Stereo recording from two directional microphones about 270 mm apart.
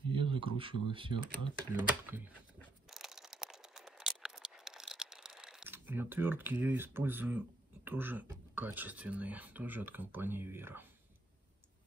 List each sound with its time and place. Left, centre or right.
0.1 s speech: centre
2.0 s speech: centre
2.6 s a sound: centre